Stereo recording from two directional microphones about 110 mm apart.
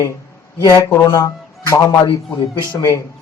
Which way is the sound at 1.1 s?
30° left (ahead or behind).